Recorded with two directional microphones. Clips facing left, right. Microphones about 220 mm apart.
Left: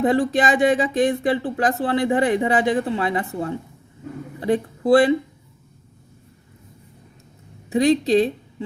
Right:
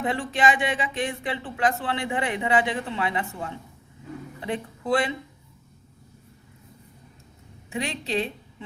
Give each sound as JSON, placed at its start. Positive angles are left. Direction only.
{"t": 0.0, "sound": "speech", "side_deg": 40}
{"t": 7.7, "sound": "speech", "side_deg": 40}